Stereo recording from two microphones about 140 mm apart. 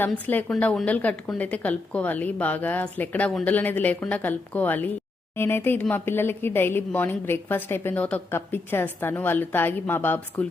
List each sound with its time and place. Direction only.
0.0 s a woman's voice: 15° left (ahead or behind)